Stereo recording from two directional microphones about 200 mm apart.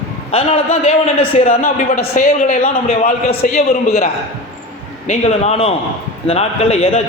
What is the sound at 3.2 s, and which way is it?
Speech, 45° left (ahead or behind).